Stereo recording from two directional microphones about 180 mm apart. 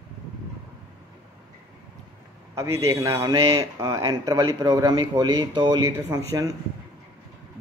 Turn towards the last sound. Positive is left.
turn(degrees=-15)  # may be behind; listen again after turning